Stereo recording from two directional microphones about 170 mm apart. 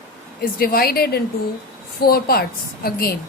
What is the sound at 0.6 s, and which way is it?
A woman's voice, 60° left (ahead or behind).